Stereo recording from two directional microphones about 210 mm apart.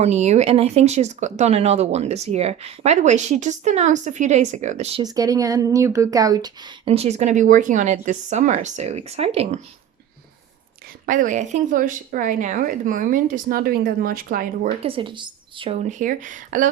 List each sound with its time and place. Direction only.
0.0 s speech: 30° right (ahead or behind)
5.0 s speech: 15° right (ahead or behind)
11.0 s speech: 40° right (ahead or behind)
14.8 s speech: 25° right (ahead or behind)